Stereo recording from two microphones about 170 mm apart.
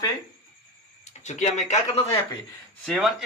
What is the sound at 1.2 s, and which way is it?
Speech, 45° left (ahead or behind).